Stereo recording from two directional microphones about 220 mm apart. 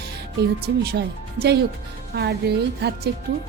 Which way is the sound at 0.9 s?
45° right (ahead or behind).